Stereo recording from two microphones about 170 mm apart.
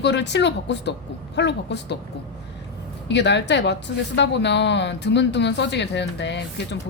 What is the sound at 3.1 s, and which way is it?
A woman's voice, 90° left.